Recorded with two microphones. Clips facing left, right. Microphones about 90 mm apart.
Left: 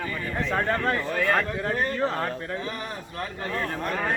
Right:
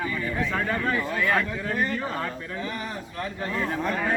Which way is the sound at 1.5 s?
30° left (ahead or behind).